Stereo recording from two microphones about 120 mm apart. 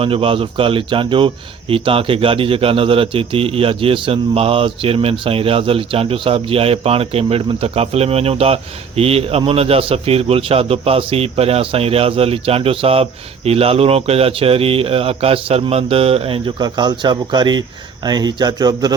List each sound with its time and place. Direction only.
0.0 s a man's voice: 50° right (ahead or behind); by 18.9 s 35° right (ahead or behind)